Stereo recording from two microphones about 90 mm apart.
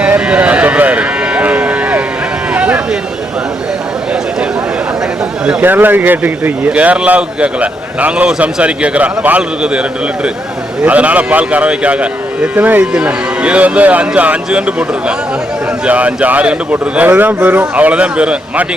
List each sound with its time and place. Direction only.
0.0 s a sound: 15° right (ahead or behind)
5.5 s speech: 20° right (ahead or behind)
10.8 s speech: 15° right (ahead or behind)